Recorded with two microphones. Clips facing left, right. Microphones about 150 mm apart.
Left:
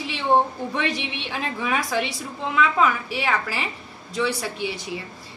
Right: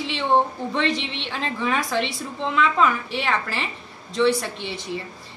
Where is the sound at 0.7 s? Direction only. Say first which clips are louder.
Right 2 dB; 10° left (ahead or behind).